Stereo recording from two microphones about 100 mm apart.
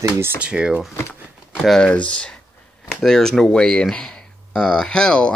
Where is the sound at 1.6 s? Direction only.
5° left (ahead or behind).